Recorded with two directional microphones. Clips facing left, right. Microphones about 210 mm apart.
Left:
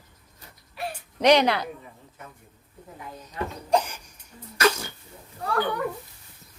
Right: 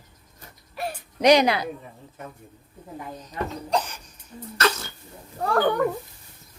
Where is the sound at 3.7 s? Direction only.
10° left (ahead or behind).